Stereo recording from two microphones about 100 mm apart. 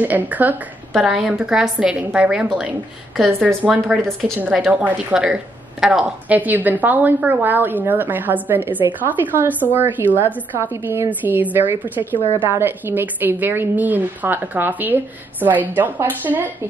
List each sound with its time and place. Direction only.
0.0 s a woman's voice: 15° right (ahead or behind)
0.9 s a woman's voice: centre (ahead or behind)
4.5 s a woman's voice: centre (ahead or behind)
4.7 s a woman's voice: 10° right (ahead or behind)